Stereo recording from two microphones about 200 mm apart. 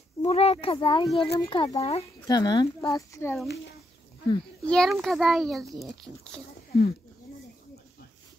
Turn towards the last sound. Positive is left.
turn(degrees=50)  # may be behind; listen again after turning